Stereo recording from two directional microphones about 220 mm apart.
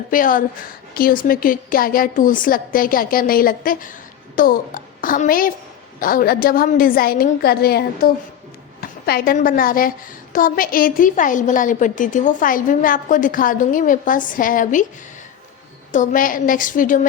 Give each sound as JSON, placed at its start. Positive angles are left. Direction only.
{"t": 0.1, "sound": "a woman's voice", "side_deg": 40}
{"t": 15.9, "sound": "a woman's voice", "side_deg": 35}